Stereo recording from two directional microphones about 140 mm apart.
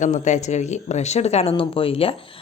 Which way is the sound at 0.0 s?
60° left (ahead or behind).